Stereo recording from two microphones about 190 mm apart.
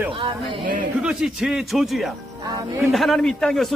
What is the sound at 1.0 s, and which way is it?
A man's voice, 5° right (ahead or behind).